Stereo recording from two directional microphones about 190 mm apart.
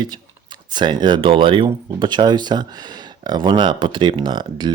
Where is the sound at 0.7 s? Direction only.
25° right (ahead or behind).